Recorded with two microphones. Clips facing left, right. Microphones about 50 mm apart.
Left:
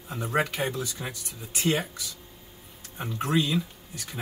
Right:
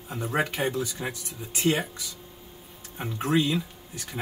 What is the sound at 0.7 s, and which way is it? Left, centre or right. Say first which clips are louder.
Speech: right 3 dB; right.